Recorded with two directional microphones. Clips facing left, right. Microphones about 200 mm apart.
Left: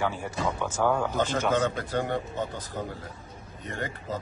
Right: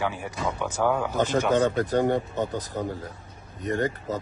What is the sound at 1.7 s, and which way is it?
Speech, 45° right (ahead or behind).